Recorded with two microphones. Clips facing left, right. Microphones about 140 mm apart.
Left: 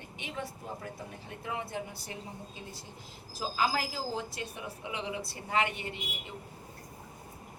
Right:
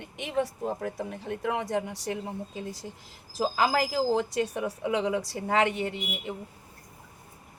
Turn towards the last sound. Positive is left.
turn(degrees=-80)